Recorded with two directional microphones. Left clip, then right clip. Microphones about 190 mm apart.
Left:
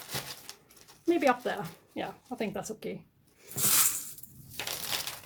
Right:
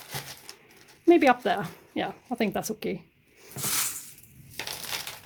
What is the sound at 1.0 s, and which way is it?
Speech, 50° right (ahead or behind).